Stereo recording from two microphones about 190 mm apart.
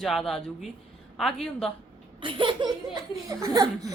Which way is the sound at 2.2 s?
25° right (ahead or behind).